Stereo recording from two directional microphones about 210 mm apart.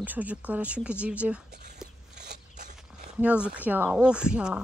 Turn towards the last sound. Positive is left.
turn(degrees=-5)  # may be behind; listen again after turning